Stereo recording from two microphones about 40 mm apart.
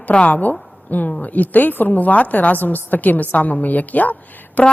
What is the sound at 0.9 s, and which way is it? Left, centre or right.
A woman's voice, left.